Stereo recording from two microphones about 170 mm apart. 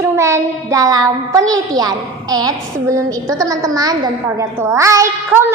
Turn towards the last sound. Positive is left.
turn(degrees=-15)  # may be behind; listen again after turning